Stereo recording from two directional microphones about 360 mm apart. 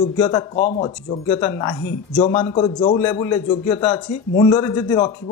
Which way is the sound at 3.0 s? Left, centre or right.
Centre.